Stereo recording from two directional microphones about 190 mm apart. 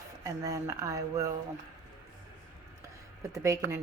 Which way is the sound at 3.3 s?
15° right (ahead or behind).